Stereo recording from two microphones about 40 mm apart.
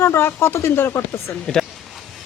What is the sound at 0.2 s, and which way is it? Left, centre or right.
Speech, left.